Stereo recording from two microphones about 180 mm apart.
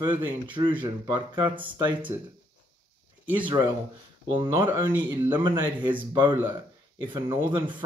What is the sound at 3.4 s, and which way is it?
Speech, 20° right (ahead or behind).